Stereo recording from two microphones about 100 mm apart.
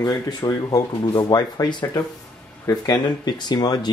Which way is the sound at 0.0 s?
40° left (ahead or behind).